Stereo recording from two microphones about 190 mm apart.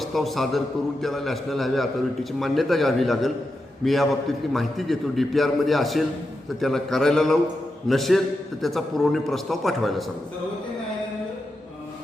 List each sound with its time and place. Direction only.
0.0 s a man's voice: centre (ahead or behind)